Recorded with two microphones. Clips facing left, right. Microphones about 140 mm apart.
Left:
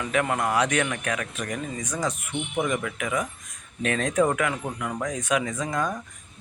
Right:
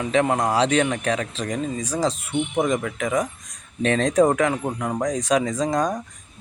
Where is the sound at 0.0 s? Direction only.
25° right (ahead or behind).